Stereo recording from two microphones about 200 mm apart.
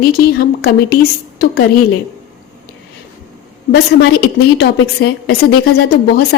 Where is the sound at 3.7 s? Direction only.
55° left (ahead or behind).